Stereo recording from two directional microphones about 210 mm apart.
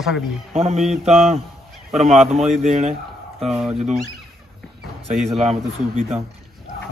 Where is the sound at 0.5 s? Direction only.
30° right (ahead or behind).